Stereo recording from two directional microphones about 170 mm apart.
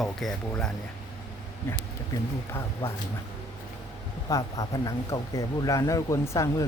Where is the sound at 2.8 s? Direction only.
15° left (ahead or behind).